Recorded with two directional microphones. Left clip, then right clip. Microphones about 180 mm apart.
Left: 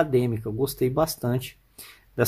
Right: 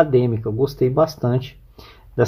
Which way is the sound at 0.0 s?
15° left (ahead or behind).